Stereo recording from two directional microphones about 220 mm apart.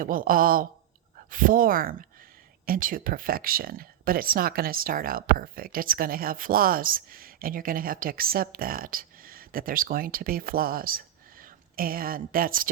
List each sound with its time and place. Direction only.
0.0 s speech: 40° right (ahead or behind)